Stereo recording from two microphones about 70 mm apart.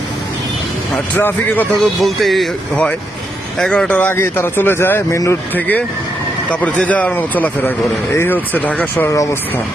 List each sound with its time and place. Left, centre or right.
0.9 s a man's voice: left
1.8 s speech: centre
3.7 s speech: centre
3.9 s speech: left
5.5 s a man's voice: left
9.0 s speech: left